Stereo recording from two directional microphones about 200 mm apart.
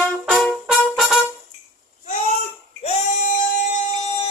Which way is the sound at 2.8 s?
35° left (ahead or behind).